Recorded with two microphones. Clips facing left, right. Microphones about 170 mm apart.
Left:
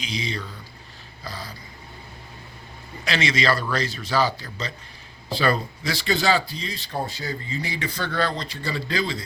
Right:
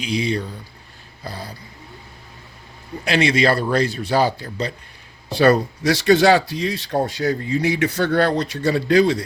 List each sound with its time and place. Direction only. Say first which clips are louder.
0.1 s speech: right 10 dB; 60° right (ahead or behind)
3.0 s speech: right 7 dB; 55° right (ahead or behind)
5.4 s speech: right 8 dB; 75° right (ahead or behind)